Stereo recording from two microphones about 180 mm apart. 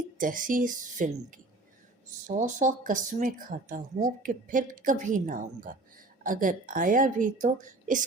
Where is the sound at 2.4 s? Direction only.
45° right (ahead or behind).